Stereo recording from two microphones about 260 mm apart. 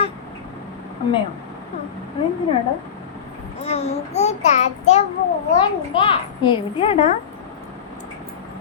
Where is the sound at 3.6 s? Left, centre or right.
Left.